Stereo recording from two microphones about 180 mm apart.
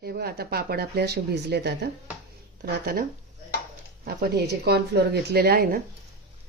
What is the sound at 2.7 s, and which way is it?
Speech, 55° right (ahead or behind).